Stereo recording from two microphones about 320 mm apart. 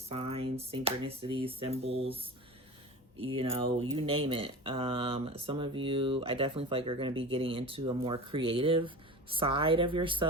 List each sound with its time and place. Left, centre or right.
0.1 s speech: centre